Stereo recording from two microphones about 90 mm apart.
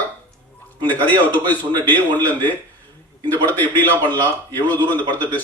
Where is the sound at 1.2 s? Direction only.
20° left (ahead or behind).